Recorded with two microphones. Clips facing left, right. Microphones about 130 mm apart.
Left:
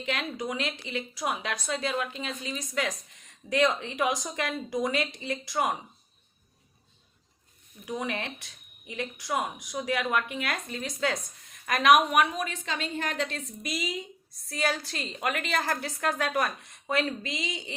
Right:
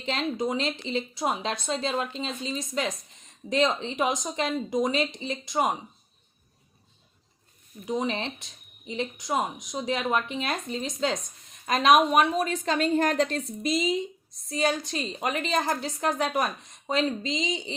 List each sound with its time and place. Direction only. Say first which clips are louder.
0.0 s speech: right 4 dB; 30° right (ahead or behind)
7.9 s speech: right 4 dB; 25° right (ahead or behind)
13.7 s speech: right 8 dB; 25° right (ahead or behind)